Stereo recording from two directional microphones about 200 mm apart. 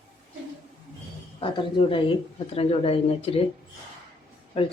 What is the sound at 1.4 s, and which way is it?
Speech, 25° left (ahead or behind).